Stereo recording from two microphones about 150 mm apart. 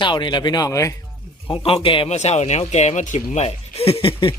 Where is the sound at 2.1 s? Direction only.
50° left (ahead or behind).